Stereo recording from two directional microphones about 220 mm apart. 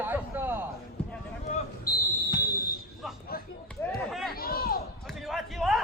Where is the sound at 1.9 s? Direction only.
40° left (ahead or behind).